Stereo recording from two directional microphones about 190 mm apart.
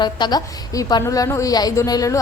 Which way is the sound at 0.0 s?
20° left (ahead or behind).